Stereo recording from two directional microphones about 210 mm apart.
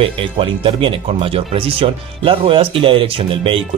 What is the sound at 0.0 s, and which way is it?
Speech, 25° right (ahead or behind).